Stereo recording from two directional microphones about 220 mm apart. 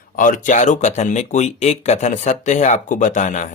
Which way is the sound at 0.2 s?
35° left (ahead or behind).